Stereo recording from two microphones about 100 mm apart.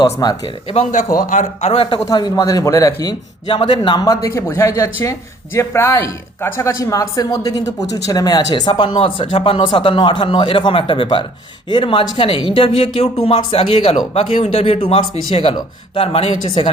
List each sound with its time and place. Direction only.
0.0 s a man's voice: 45° left (ahead or behind)
0.7 s a woman's voice: 70° left (ahead or behind)
2.1 s a man's voice: 45° left (ahead or behind)
4.0 s a man's voice: 35° left (ahead or behind); by 13.1 s 65° left (ahead or behind)
13.2 s a woman's voice: 75° left (ahead or behind)